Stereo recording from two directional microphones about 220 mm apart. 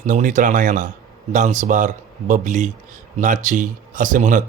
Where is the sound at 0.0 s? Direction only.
35° right (ahead or behind).